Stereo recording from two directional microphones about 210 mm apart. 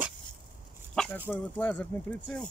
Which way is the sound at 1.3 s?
5° left (ahead or behind).